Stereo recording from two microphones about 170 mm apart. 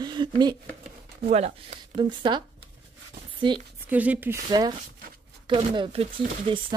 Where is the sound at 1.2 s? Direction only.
40° right (ahead or behind).